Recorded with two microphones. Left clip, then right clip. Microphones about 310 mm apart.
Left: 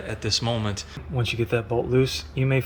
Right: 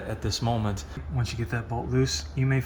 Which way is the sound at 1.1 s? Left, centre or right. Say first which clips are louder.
Left 9 dB; left.